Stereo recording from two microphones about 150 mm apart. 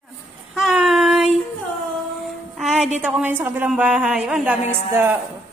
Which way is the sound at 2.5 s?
Centre (ahead or behind).